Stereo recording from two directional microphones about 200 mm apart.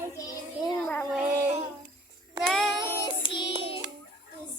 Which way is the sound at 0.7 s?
5° left (ahead or behind).